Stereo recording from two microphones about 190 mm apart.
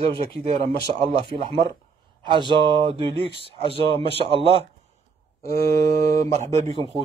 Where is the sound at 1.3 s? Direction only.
25° right (ahead or behind).